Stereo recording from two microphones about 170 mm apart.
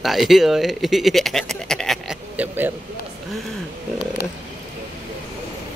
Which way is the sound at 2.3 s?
10° right (ahead or behind).